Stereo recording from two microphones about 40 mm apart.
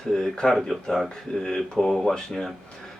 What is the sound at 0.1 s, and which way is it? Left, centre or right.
Speech, centre.